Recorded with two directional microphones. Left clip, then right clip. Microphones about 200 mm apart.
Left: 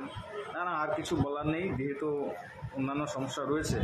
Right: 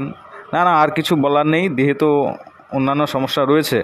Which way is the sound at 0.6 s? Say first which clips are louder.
Right 19 dB; 55° right (ahead or behind).